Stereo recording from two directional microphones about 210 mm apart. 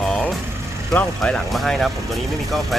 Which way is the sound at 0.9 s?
5° left (ahead or behind).